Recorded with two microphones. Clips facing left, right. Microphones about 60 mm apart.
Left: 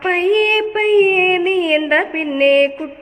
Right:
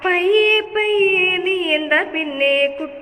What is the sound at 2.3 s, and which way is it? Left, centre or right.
Mantra, left.